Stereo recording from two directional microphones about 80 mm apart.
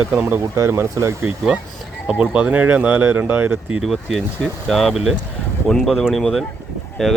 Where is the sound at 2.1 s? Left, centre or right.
Centre.